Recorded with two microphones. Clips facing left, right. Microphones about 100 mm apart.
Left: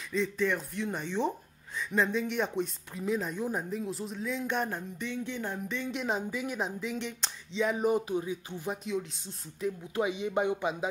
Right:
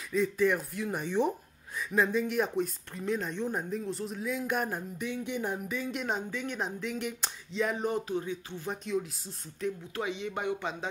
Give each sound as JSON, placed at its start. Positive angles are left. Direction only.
{"t": 0.1, "sound": "speech", "side_deg": -5}
{"t": 5.8, "sound": "speech", "side_deg": 0}
{"t": 7.8, "sound": "speech", "side_deg": 15}
{"t": 8.6, "sound": "speech", "side_deg": 0}
{"t": 9.9, "sound": "speech", "side_deg": 15}